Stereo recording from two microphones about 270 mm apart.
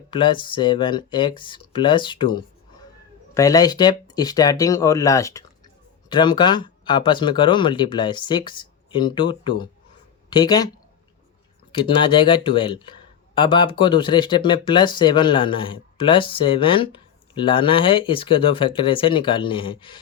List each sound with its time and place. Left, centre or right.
0.1 s speech: centre
11.7 s speech: centre